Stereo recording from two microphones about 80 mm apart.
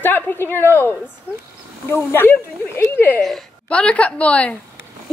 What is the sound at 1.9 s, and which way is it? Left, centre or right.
Speech, left.